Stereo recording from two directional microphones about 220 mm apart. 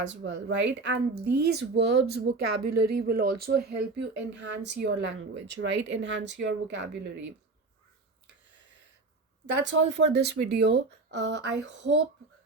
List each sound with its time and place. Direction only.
0.1 s speech: 55° right (ahead or behind)
9.5 s speech: 55° right (ahead or behind)